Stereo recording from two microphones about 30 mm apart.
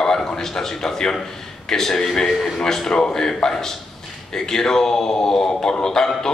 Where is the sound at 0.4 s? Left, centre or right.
Centre.